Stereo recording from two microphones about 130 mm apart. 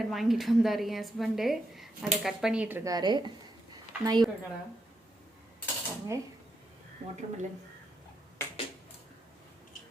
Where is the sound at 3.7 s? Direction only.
30° right (ahead or behind).